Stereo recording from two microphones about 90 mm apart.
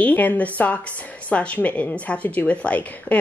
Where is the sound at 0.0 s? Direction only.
20° left (ahead or behind).